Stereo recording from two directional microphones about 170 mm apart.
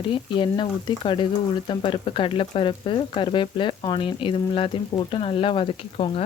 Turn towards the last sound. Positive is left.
turn(degrees=30)  # may be behind; listen again after turning